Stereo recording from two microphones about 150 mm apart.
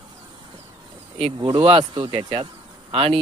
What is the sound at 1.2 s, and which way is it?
Speech, 35° right (ahead or behind).